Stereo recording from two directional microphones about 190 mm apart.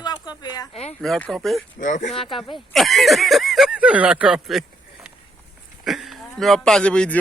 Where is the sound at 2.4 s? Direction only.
Centre (ahead or behind).